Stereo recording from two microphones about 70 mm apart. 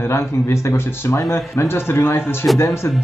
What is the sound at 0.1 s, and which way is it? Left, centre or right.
Speech, left.